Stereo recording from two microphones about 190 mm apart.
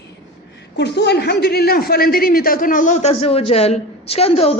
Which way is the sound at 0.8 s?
65° left (ahead or behind).